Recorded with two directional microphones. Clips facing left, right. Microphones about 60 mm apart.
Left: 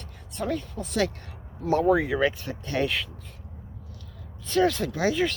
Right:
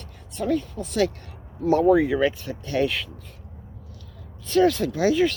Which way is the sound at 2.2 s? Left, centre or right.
Left.